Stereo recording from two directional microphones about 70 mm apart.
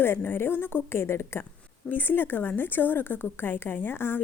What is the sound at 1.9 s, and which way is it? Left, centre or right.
A woman's voice, left.